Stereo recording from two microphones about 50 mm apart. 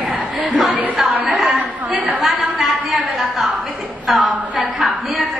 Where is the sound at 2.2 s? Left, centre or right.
Centre.